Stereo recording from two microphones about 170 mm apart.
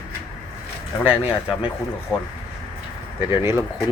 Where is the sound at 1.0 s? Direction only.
10° right (ahead or behind).